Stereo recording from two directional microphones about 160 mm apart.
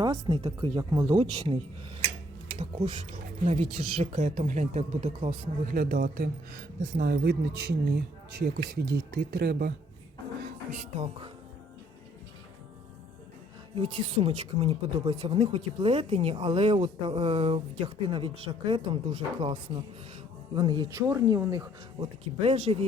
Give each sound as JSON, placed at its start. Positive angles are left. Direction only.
{"t": 0.0, "sound": "speech", "side_deg": -30}
{"t": 3.1, "sound": "speech", "side_deg": -45}
{"t": 5.7, "sound": "speech", "side_deg": -65}
{"t": 13.7, "sound": "speech", "side_deg": -35}
{"t": 20.6, "sound": "speech", "side_deg": -25}
{"t": 22.0, "sound": "speech", "side_deg": -40}